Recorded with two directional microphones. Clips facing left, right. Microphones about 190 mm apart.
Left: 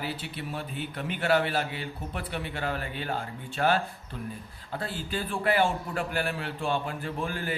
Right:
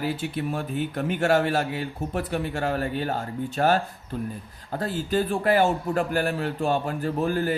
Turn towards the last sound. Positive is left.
turn(degrees=-40)  # may be behind; listen again after turning